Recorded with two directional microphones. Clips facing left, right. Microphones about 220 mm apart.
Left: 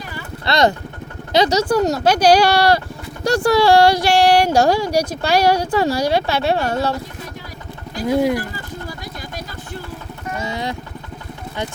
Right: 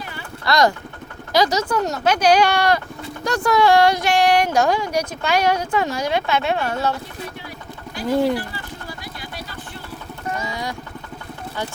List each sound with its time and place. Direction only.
0.4 s speech: 25° left (ahead or behind)
8.0 s speech: 15° left (ahead or behind)
10.4 s a sound: 25° left (ahead or behind)